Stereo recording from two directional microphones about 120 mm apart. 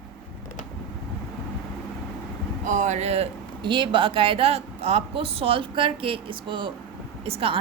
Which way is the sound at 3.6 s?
40° right (ahead or behind).